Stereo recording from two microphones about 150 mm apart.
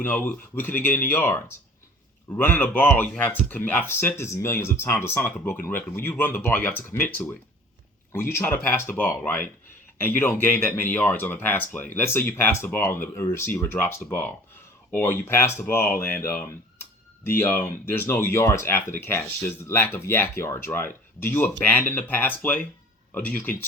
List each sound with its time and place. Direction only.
0.0 s speech: 15° left (ahead or behind)